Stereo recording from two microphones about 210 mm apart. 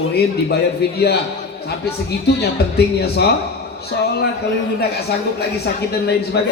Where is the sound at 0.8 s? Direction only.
50° left (ahead or behind).